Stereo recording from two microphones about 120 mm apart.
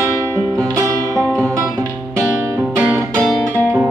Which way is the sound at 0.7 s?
25° right (ahead or behind).